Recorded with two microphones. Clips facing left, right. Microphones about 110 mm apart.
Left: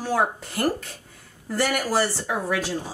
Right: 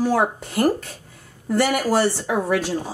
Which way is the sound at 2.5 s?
5° right (ahead or behind).